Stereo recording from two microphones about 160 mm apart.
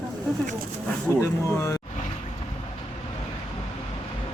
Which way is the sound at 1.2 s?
15° left (ahead or behind).